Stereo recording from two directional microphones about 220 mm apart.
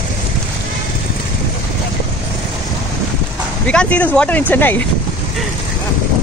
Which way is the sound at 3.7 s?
5° left (ahead or behind).